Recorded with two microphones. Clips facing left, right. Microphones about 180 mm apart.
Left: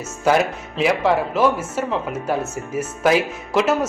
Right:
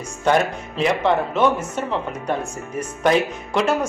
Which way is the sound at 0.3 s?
5° left (ahead or behind).